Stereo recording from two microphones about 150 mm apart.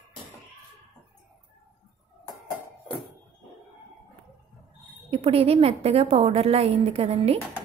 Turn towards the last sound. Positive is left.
turn(degrees=-45)  # may be behind; listen again after turning